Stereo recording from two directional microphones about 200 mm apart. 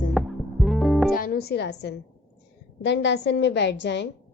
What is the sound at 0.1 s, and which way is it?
Music, centre (ahead or behind).